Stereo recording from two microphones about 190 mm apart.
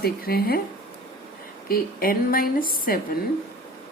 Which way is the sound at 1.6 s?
50° left (ahead or behind).